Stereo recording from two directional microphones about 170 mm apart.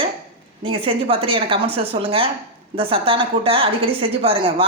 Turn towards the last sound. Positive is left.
turn(degrees=-30)  # may be behind; listen again after turning